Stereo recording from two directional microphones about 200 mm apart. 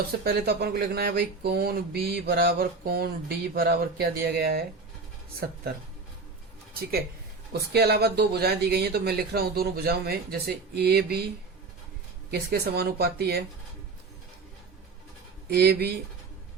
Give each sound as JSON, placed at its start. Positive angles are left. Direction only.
{"t": 0.3, "sound": "speech", "side_deg": -55}
{"t": 7.7, "sound": "speech", "side_deg": -55}
{"t": 12.3, "sound": "speech", "side_deg": -50}
{"t": 15.4, "sound": "speech", "side_deg": -50}